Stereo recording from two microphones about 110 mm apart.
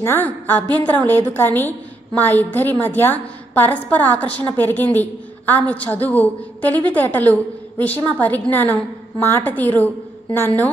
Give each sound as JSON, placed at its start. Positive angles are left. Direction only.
{"t": 0.0, "sound": "a woman's voice", "side_deg": 20}